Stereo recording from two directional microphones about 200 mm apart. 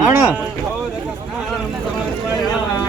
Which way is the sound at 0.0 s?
5° right (ahead or behind).